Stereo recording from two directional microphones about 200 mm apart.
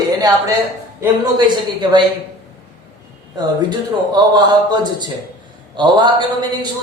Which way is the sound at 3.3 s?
20° right (ahead or behind).